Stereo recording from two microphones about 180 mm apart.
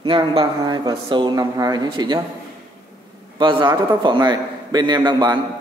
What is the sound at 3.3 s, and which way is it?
A man's voice, 25° right (ahead or behind).